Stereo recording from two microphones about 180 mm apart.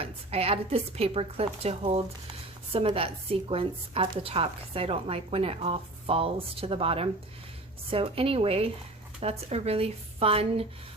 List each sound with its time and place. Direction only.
0.0 s a woman's voice: 35° right (ahead or behind)